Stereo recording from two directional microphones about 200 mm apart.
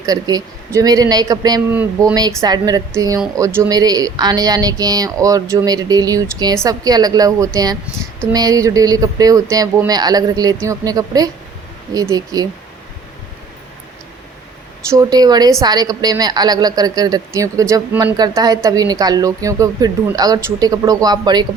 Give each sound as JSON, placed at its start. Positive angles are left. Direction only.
{"t": 0.0, "sound": "a woman's voice", "side_deg": -20}
{"t": 1.7, "sound": "speech", "side_deg": -10}
{"t": 2.4, "sound": "a woman's voice", "side_deg": -20}
{"t": 14.8, "sound": "a woman's voice", "side_deg": -15}